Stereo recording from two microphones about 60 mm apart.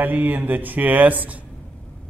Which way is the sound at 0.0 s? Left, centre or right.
Right.